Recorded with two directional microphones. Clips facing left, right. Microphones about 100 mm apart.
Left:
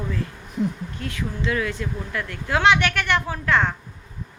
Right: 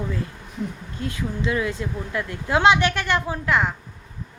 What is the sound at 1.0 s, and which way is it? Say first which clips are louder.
Speech: right 2 dB; 25° right (ahead or behind).